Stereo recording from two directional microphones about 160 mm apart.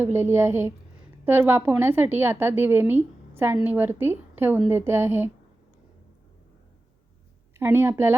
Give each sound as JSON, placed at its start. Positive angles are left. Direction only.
{"t": 0.0, "sound": "a woman's voice", "side_deg": -15}
{"t": 7.5, "sound": "a woman's voice", "side_deg": -15}